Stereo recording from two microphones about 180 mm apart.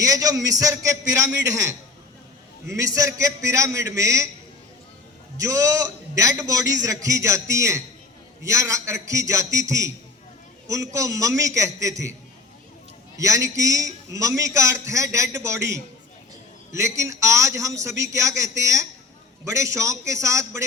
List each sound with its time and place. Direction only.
0.0 s a man's voice: 20° right (ahead or behind)
5.4 s a man's voice: 20° right (ahead or behind)
13.1 s a man's voice: 20° right (ahead or behind)